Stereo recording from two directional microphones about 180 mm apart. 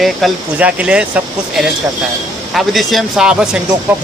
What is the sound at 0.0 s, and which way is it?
Speech, centre (ahead or behind).